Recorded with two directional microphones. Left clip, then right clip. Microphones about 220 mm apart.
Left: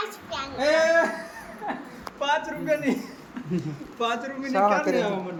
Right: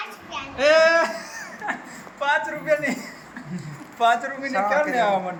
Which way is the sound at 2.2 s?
10° left (ahead or behind).